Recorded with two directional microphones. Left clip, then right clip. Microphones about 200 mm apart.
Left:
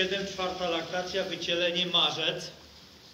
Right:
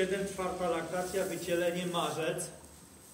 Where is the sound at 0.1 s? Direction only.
40° right (ahead or behind).